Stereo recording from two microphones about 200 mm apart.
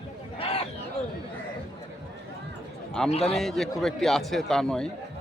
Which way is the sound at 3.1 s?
30° left (ahead or behind).